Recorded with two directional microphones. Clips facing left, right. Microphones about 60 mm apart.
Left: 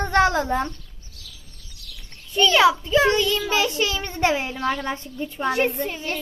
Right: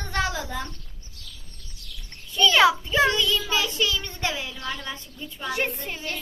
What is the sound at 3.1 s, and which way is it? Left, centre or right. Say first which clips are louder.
A child's voice: left 4 dB; left.